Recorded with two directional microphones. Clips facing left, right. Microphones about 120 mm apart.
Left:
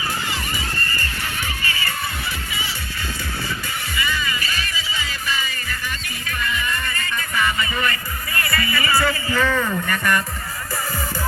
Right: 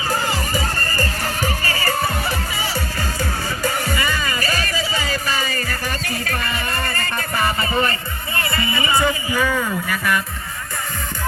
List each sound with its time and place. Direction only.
0.1 s music: 40° right (ahead or behind)
3.6 s music: 45° right (ahead or behind)
8.4 s a man's voice: 25° right (ahead or behind); by 10.2 s centre (ahead or behind)